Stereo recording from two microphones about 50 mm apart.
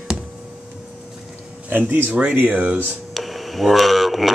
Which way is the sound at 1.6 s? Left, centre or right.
Right.